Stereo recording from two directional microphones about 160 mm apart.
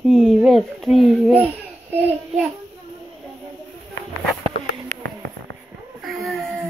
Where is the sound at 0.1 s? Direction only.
Centre (ahead or behind).